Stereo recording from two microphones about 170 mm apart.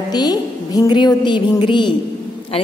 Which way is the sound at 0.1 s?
25° left (ahead or behind).